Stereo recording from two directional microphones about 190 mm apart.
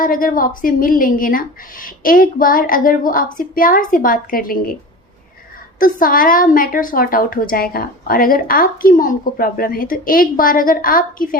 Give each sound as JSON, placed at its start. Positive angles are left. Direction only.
{"t": 0.0, "sound": "a woman's voice", "side_deg": 45}
{"t": 5.8, "sound": "a woman's voice", "side_deg": 45}